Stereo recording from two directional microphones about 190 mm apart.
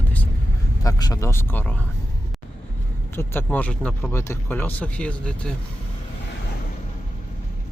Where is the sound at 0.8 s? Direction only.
20° left (ahead or behind).